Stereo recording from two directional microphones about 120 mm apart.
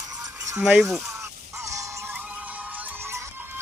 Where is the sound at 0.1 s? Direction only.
30° right (ahead or behind).